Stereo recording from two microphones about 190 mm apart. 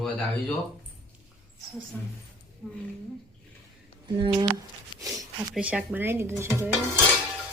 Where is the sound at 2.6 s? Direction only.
5° right (ahead or behind).